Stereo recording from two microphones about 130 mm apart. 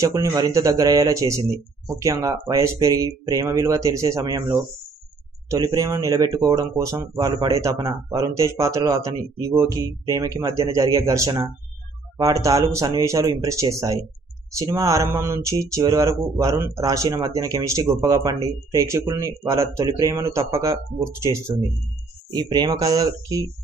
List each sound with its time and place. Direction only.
0.0 s speech: 25° right (ahead or behind)
4.2 s speech: 35° right (ahead or behind); by 21.5 s 20° right (ahead or behind)
22.3 s speech: 30° right (ahead or behind)